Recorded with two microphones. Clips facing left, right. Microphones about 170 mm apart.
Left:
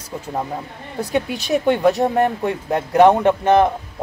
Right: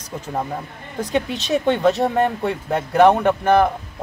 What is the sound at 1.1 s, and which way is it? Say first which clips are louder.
Speech: left 1 dB; 10° left (ahead or behind).